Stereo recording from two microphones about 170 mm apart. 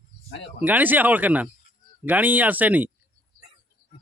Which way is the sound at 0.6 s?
10° right (ahead or behind).